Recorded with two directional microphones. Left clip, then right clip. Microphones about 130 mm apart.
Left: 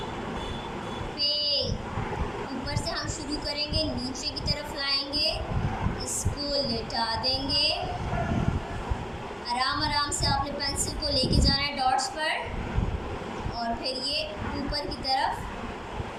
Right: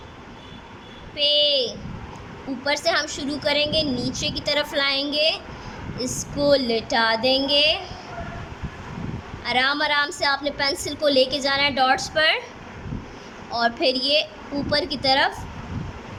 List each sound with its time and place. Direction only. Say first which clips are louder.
1.2 s a sound: right 8 dB; 90° right
2.6 s a woman's voice: right 15 dB; 90° right
9.5 s a woman's voice: right 7 dB; 90° right
13.5 s a woman's voice: right 11 dB; 90° right